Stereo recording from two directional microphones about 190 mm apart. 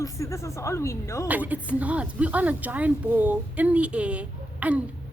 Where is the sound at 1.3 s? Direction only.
10° right (ahead or behind).